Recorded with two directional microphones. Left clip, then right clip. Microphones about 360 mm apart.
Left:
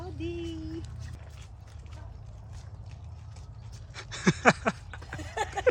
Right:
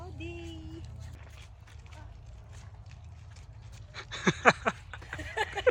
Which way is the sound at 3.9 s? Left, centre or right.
Centre.